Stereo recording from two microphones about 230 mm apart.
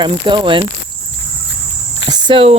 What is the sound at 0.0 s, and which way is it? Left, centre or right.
Speech, right.